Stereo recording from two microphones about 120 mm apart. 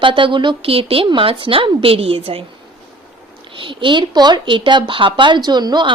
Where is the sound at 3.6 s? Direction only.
45° right (ahead or behind).